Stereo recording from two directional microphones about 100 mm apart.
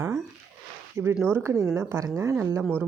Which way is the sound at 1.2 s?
25° right (ahead or behind).